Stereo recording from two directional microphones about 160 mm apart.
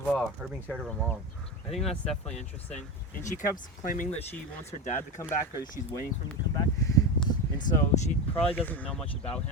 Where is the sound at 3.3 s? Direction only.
55° left (ahead or behind).